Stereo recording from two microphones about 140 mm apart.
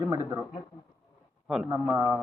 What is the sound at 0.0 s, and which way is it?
Speech, 25° right (ahead or behind).